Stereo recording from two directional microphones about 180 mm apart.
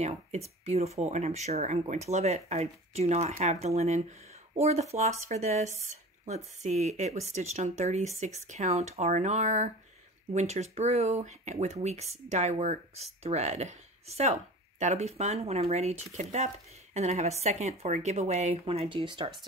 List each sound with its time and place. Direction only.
0.0 s speech: 35° right (ahead or behind)